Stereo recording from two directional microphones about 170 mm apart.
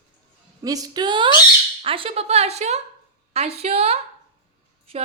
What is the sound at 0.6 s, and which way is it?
A woman's voice, 20° right (ahead or behind).